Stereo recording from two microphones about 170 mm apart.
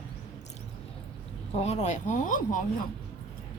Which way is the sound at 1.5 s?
40° left (ahead or behind).